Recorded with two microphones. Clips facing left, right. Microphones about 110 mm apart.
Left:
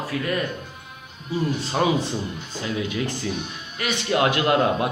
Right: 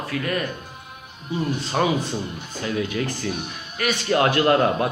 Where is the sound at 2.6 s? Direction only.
20° left (ahead or behind).